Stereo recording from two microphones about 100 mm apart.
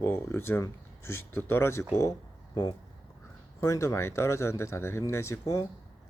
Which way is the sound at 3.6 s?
30° left (ahead or behind).